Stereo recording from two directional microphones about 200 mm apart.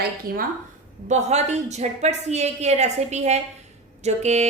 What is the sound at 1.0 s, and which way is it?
Speech, 35° right (ahead or behind).